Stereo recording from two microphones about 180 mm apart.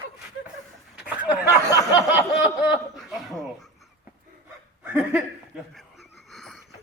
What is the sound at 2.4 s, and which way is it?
Chuckle, 5° right (ahead or behind).